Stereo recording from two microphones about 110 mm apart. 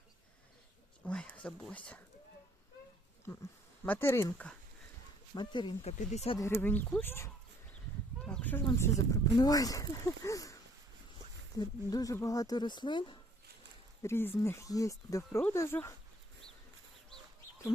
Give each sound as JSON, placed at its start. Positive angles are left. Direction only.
{"t": 1.0, "sound": "speech", "side_deg": 10}
{"t": 3.8, "sound": "speech", "side_deg": 20}
{"t": 5.3, "sound": "speech", "side_deg": 40}
{"t": 5.8, "sound": "speech", "side_deg": 80}
{"t": 6.4, "sound": "speech", "side_deg": 15}
{"t": 8.2, "sound": "a sound", "side_deg": 10}
{"t": 8.8, "sound": "speech", "side_deg": 35}
{"t": 14.0, "sound": "speech", "side_deg": 20}